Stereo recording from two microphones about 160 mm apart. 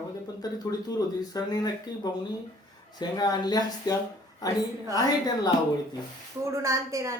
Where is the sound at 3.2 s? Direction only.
25° left (ahead or behind).